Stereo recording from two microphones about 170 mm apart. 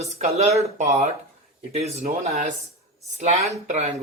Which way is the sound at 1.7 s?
40° right (ahead or behind).